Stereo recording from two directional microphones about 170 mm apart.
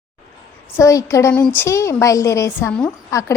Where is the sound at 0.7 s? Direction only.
20° left (ahead or behind).